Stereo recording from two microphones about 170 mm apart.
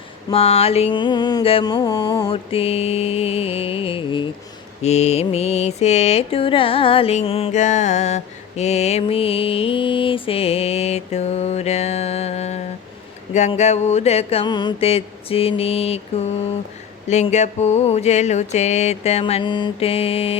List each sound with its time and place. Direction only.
0.3 s music: 35° left (ahead or behind)
2.5 s mantra: 35° left (ahead or behind)